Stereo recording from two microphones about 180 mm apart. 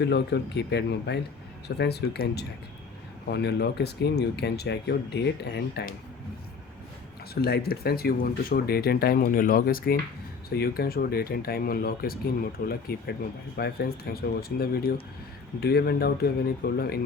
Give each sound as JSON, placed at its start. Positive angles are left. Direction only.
{"t": 0.0, "sound": "speech", "side_deg": 70}
{"t": 7.4, "sound": "speech", "side_deg": 60}